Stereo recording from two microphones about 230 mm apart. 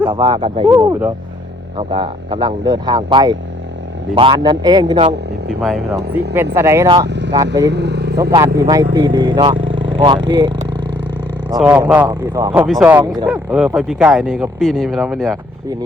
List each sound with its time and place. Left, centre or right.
0.0 s speech: right
5.5 s speech: centre
7.1 s vehicle: right
7.7 s speech: right
8.2 s speech: centre
11.6 s speech: centre